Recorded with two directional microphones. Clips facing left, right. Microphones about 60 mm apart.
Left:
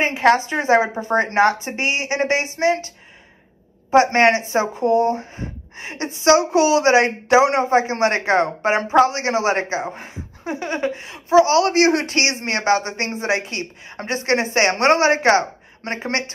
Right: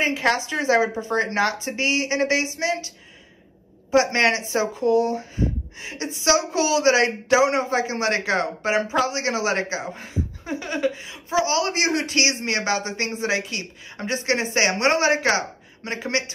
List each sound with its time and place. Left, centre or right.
0.0 s speech: left
3.9 s speech: left